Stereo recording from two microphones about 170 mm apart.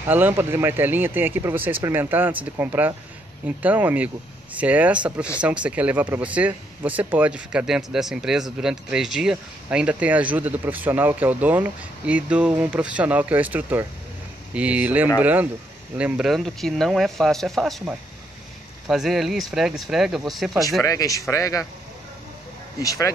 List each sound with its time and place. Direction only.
0.0 s speech: 10° right (ahead or behind)
20.8 s a man's voice: 20° left (ahead or behind)
22.8 s a man's voice: 20° left (ahead or behind)